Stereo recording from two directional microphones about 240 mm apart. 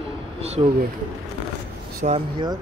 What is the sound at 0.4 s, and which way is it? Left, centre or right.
Speech, right.